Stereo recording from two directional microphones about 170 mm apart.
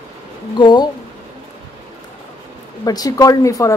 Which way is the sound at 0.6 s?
25° left (ahead or behind).